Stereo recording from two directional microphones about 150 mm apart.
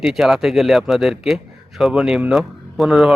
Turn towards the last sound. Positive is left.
turn(degrees=0)  # may be behind; listen again after turning